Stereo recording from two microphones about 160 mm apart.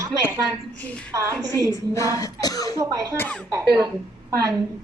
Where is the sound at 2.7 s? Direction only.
20° right (ahead or behind).